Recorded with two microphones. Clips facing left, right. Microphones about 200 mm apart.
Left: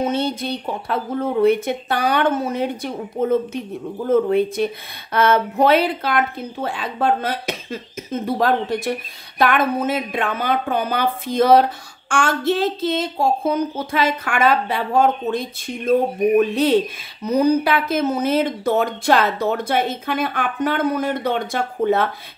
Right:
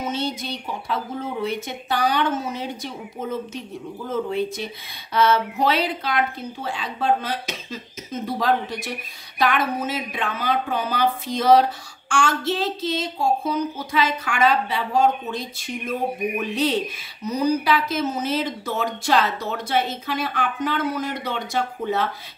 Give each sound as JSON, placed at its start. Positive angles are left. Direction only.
{"t": 0.0, "sound": "speech", "side_deg": 55}
{"t": 17.2, "sound": "speech", "side_deg": 55}